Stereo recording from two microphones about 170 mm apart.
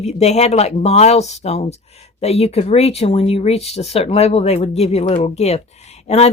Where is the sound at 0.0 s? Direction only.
40° left (ahead or behind).